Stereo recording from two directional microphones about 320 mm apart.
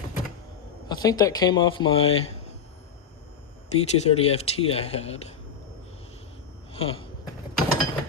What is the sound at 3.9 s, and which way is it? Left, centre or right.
Speech, centre.